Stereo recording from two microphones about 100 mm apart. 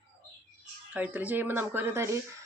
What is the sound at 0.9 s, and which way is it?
Speech, 15° right (ahead or behind).